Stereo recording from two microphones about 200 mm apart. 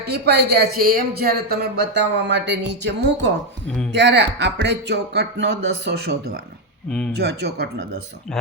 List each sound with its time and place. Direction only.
0.0 s speech: 55° right (ahead or behind)